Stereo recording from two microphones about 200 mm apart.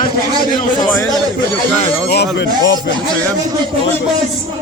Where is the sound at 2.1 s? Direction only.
60° left (ahead or behind).